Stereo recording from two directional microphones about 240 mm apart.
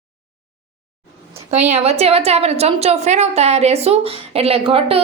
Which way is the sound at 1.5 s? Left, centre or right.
Right.